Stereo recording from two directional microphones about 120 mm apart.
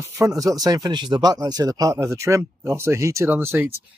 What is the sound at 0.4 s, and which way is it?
Speech, 30° right (ahead or behind).